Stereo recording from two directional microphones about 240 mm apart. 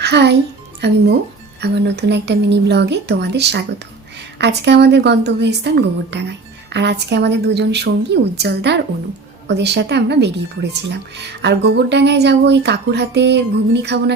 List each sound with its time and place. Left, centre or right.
0.0 s a child's voice: right